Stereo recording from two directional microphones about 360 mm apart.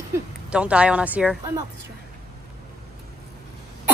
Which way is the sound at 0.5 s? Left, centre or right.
Centre.